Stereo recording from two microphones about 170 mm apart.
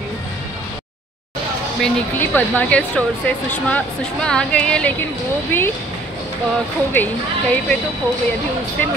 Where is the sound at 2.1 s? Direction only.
10° left (ahead or behind).